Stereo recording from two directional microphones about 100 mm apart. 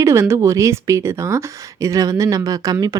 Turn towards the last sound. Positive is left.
turn(degrees=-35)  # may be behind; listen again after turning